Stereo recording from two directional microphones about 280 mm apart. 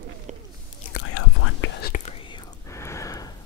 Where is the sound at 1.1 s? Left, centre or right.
Left.